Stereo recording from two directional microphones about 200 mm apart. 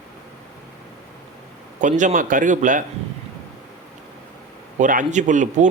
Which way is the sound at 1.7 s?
40° right (ahead or behind).